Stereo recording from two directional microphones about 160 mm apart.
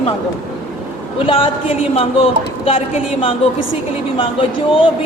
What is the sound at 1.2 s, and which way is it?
A woman's voice, 35° left (ahead or behind).